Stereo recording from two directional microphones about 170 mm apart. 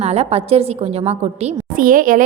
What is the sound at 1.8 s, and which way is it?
Speech, 55° right (ahead or behind).